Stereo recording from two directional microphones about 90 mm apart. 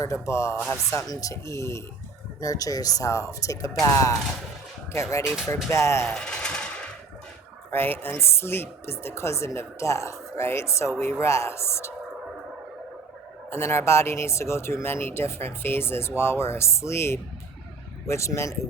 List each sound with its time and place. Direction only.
0.0 s speech: 35° left (ahead or behind)
0.5 s speech: 15° left (ahead or behind)
0.9 s speech: 40° left (ahead or behind)
6.1 s a sound: 10° left (ahead or behind)
7.7 s speech: 25° left (ahead or behind)
13.5 s speech: 30° left (ahead or behind)